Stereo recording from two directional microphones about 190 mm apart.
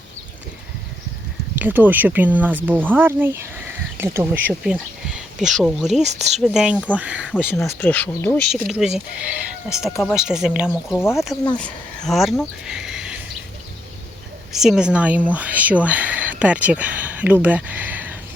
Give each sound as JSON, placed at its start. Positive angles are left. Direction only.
{"t": 1.5, "sound": "speech", "side_deg": -10}
{"t": 6.0, "sound": "speech", "side_deg": -35}
{"t": 6.4, "sound": "speech", "side_deg": -5}
{"t": 7.8, "sound": "speech", "side_deg": 10}
{"t": 10.9, "sound": "speech", "side_deg": 15}
{"t": 14.5, "sound": "speech", "side_deg": 0}